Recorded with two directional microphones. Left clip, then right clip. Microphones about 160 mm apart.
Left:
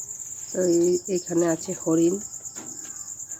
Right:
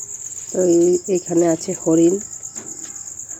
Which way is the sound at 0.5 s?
5° right (ahead or behind).